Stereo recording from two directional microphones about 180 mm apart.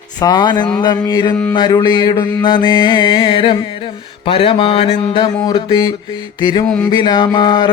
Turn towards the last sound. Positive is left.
turn(degrees=25)  # may be behind; listen again after turning